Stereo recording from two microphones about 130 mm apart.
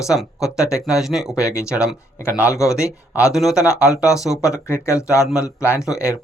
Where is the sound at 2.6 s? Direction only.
5° right (ahead or behind).